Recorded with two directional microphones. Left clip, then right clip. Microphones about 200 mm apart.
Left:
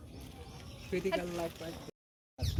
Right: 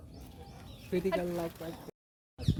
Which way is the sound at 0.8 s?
40° right (ahead or behind).